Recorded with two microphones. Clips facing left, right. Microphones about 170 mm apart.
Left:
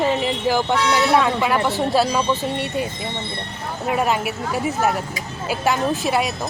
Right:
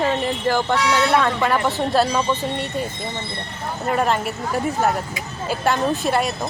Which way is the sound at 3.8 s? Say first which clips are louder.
Even; 5° left (ahead or behind).